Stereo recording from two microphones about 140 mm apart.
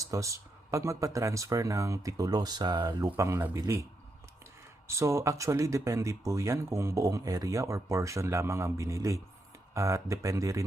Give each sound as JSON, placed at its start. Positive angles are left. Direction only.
{"t": 0.0, "sound": "speech", "side_deg": -25}
{"t": 4.9, "sound": "speech", "side_deg": -20}